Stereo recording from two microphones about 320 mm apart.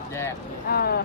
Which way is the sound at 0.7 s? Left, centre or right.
Left.